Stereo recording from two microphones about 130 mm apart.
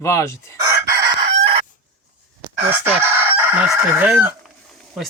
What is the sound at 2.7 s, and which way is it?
Chicken, 15° right (ahead or behind).